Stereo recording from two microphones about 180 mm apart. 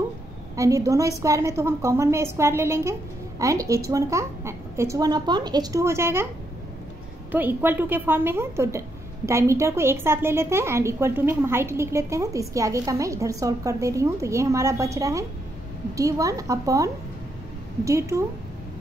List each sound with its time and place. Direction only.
0.6 s a woman's voice: 20° right (ahead or behind)
7.2 s a woman's voice: 10° right (ahead or behind)